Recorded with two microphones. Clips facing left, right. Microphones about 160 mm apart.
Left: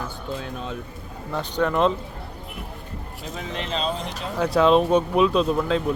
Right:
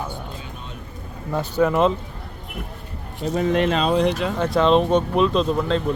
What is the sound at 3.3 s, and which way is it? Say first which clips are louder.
Speech: right 10 dB; 55° right (ahead or behind).